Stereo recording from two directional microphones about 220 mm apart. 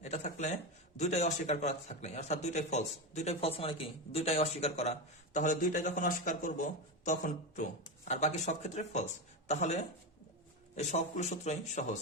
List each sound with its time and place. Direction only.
0.0 s speech: 30° left (ahead or behind)